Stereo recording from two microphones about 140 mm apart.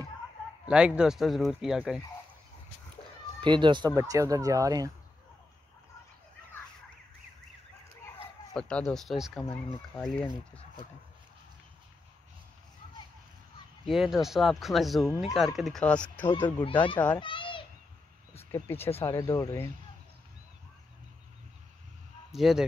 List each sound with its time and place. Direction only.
0.7 s speech: 5° right (ahead or behind)
3.4 s speech: 35° right (ahead or behind)
3.9 s speech: 20° right (ahead or behind)
8.5 s speech: 5° left (ahead or behind)
13.8 s a child's voice: centre (ahead or behind)
17.2 s a child's voice: 35° left (ahead or behind)
18.3 s a sound: 15° left (ahead or behind)
18.9 s speech: 20° left (ahead or behind)
22.3 s speech: centre (ahead or behind)